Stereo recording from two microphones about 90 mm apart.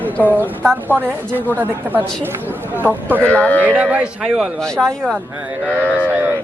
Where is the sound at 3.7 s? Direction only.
15° right (ahead or behind).